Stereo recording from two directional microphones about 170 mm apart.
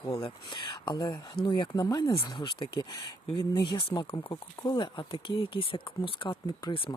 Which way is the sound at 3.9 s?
30° left (ahead or behind).